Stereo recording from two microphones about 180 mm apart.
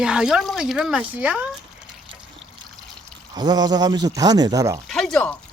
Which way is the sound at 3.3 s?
25° right (ahead or behind).